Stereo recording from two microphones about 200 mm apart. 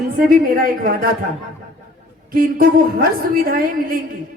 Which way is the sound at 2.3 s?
45° right (ahead or behind).